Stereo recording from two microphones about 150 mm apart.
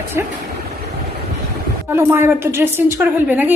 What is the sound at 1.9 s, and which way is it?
A woman's voice, 15° right (ahead or behind).